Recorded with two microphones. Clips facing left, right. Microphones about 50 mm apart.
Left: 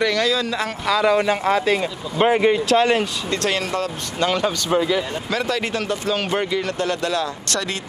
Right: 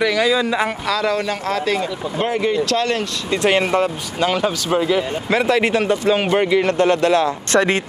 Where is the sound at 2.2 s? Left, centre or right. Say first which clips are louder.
Left 3 dB; left.